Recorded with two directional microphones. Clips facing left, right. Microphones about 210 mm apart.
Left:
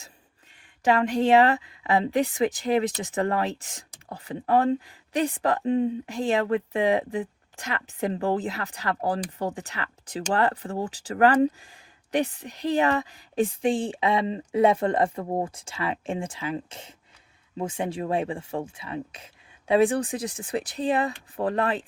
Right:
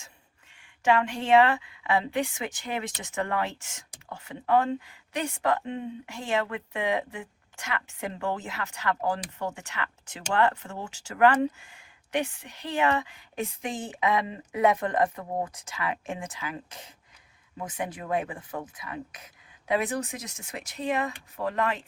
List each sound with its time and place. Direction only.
0.6 s speech: 35° left (ahead or behind)